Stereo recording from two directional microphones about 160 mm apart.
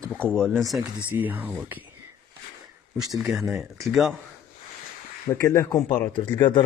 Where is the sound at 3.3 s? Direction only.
Centre (ahead or behind).